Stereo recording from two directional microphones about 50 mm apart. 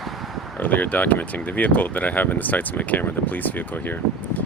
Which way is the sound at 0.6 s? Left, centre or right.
Left.